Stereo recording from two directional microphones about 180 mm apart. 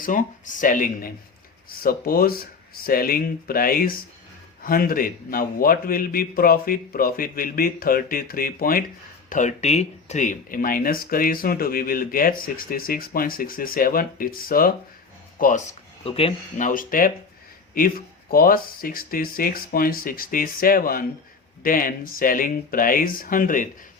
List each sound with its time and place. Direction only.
0.0 s a man's voice: 45° left (ahead or behind)
9.3 s a man's voice: 40° left (ahead or behind)
16.6 s a man's voice: 50° left (ahead or behind)